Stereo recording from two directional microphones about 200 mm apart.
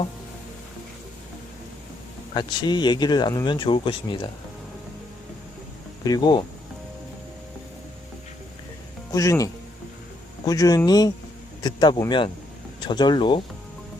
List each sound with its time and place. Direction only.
2.3 s speech: 20° left (ahead or behind)
6.1 s speech: 20° left (ahead or behind)
9.1 s speech: 15° left (ahead or behind)